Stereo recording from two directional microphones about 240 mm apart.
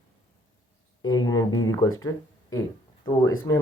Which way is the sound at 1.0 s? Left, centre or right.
Centre.